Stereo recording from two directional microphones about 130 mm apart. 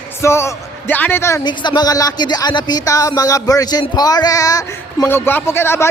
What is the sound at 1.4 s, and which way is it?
A man's voice, 35° left (ahead or behind).